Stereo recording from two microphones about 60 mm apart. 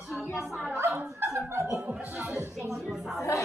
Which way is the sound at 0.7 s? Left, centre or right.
Right.